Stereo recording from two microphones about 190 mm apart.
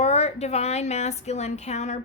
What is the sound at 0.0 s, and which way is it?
A woman's voice, 35° left (ahead or behind).